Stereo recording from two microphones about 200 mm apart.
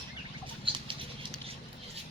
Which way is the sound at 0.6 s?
25° right (ahead or behind).